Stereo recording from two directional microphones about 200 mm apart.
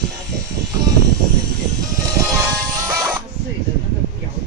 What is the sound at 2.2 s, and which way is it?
Music, 20° right (ahead or behind).